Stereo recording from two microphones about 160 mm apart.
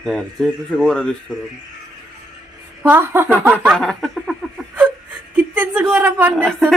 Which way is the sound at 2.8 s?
15° right (ahead or behind).